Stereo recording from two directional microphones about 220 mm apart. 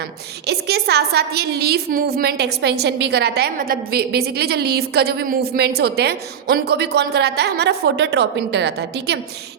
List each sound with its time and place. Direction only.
0.4 s a woman's voice: 45° right (ahead or behind)